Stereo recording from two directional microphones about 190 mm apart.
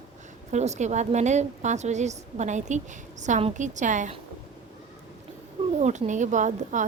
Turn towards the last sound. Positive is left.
turn(degrees=-40)  # may be behind; listen again after turning